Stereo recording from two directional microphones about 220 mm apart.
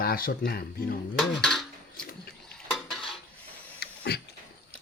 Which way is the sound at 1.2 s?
Centre (ahead or behind).